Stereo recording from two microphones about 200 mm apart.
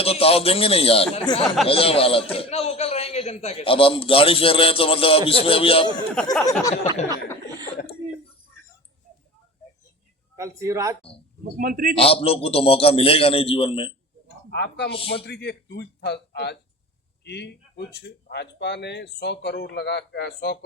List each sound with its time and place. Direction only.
0.0 s a man's voice: 30° left (ahead or behind)
6.2 s a sound: 5° left (ahead or behind)
6.6 s speech: 15° left (ahead or behind)
10.3 s a man's voice: 15° right (ahead or behind)
11.5 s a man's voice: 45° right (ahead or behind)
11.9 s a man's voice: 30° left (ahead or behind)
14.5 s speech: 55° left (ahead or behind)
14.9 s a man's voice: 30° left (ahead or behind)
15.3 s speech: 55° left (ahead or behind)